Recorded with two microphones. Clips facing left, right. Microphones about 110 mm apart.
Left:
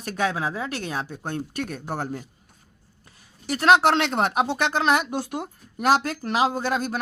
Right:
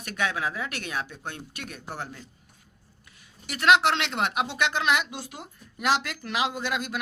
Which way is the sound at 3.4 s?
40° left (ahead or behind).